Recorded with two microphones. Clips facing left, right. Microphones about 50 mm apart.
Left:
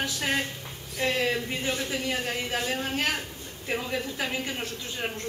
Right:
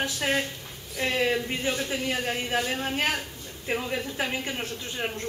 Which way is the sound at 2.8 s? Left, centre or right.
Centre.